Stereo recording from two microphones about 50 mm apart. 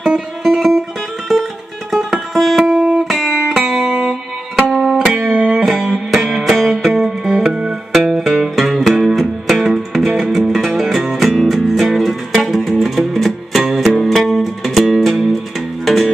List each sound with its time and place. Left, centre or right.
0.0 s music: centre
1.9 s music: centre
4.6 s music: centre
5.3 s music: centre